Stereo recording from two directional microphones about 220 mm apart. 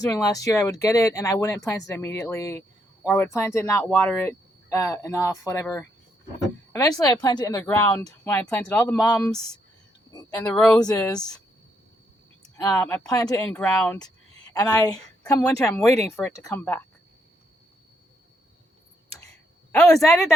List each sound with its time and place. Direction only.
0.0 s speech: 15° left (ahead or behind)
6.7 s speech: 15° left (ahead or behind)
10.1 s speech: 15° left (ahead or behind)
10.4 s speech: 5° left (ahead or behind)
10.8 s speech: 15° left (ahead or behind)
12.5 s speech: 10° left (ahead or behind)
13.5 s speech: 5° left (ahead or behind)
15.4 s speech: 15° left (ahead or behind)
19.7 s speech: 5° left (ahead or behind)